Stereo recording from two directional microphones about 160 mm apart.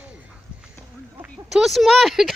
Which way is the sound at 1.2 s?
Centre (ahead or behind).